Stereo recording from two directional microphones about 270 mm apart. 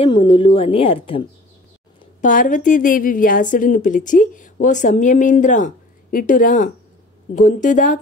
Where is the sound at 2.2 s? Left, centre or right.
Left.